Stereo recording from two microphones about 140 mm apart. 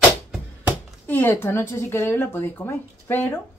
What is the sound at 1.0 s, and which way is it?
A woman's voice, 15° left (ahead or behind).